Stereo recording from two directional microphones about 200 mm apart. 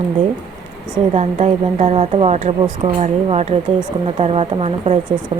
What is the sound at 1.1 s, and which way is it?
Speech, 35° right (ahead or behind).